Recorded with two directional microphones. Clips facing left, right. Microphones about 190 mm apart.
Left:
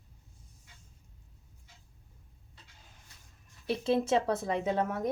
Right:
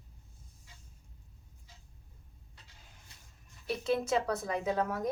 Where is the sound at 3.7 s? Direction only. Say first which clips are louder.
Left 3 dB; 30° left (ahead or behind).